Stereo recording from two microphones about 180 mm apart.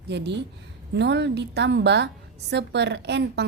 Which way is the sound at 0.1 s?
70° right (ahead or behind).